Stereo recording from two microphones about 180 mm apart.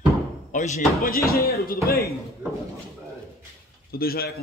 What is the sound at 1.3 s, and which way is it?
Speech, 60° left (ahead or behind).